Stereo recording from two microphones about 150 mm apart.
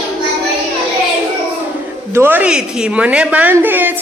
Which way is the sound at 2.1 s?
15° right (ahead or behind).